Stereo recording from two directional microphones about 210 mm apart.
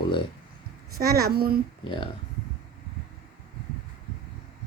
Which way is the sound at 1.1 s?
45° right (ahead or behind).